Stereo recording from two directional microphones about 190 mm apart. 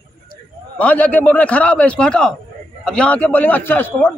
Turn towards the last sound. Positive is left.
turn(degrees=10)  # may be behind; listen again after turning